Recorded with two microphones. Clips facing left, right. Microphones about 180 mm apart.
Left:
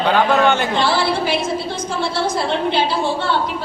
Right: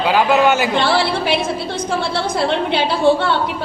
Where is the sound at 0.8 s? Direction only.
60° right (ahead or behind).